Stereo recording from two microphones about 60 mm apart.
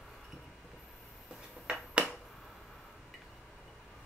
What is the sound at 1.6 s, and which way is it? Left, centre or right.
Finger snapping, centre.